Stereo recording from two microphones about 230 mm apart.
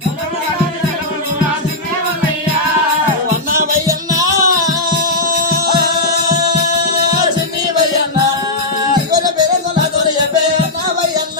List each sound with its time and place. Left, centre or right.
3.8 s music: centre